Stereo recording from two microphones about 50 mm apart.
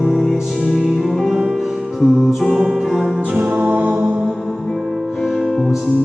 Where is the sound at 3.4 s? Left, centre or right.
Right.